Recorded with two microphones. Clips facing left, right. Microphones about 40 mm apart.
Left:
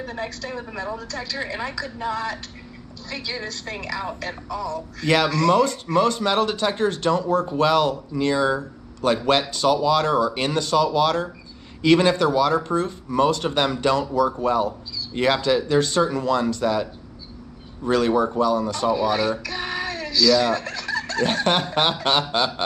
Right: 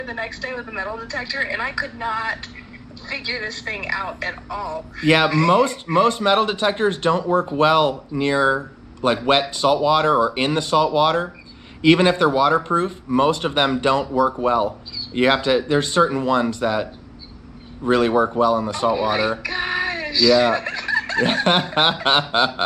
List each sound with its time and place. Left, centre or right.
0.0 s a woman's voice: centre